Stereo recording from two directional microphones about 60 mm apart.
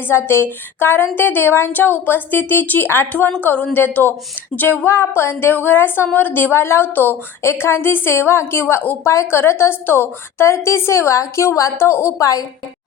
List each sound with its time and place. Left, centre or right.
0.1 s a woman's voice: left
4.9 s a woman's voice: left
7.4 s a woman's voice: left
12.2 s a woman's voice: left